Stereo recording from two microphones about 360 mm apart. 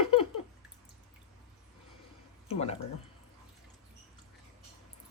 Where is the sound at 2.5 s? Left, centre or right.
Centre.